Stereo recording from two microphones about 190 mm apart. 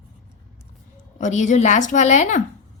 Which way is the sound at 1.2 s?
40° left (ahead or behind).